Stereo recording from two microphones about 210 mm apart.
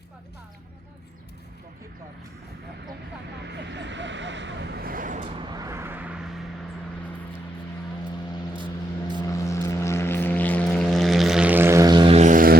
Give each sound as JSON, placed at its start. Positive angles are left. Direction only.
{"t": 3.4, "sound": "vehicle", "side_deg": -55}
{"t": 5.4, "sound": "vehicle", "side_deg": -20}
{"t": 8.5, "sound": "vehicle", "side_deg": -20}
{"t": 9.2, "sound": "vehicle", "side_deg": 15}